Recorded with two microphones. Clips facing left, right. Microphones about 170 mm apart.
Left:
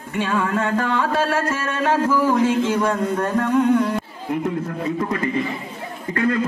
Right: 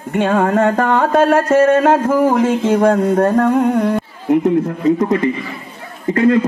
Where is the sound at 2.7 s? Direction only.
60° right (ahead or behind).